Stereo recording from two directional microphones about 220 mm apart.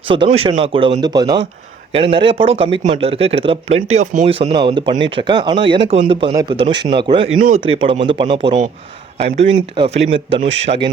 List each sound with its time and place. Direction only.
0.1 s speech: 25° right (ahead or behind)
7.3 s speech: 35° right (ahead or behind)
7.6 s speech: 25° right (ahead or behind)